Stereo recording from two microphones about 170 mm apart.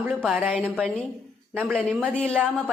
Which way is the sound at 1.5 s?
10° right (ahead or behind).